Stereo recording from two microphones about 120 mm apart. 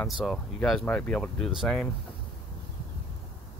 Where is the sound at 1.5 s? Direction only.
5° right (ahead or behind).